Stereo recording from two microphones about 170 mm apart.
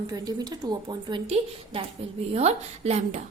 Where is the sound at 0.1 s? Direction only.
20° right (ahead or behind).